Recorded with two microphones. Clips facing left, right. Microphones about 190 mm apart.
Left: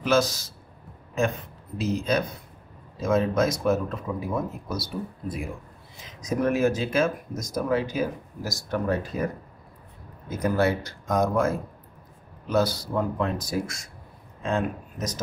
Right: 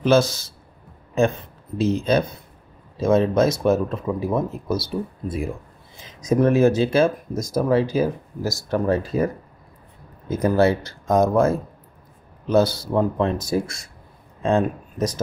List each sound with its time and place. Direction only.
0.0 s speech: 30° right (ahead or behind)
1.8 s speech: 30° right (ahead or behind)
10.3 s speech: 30° right (ahead or behind)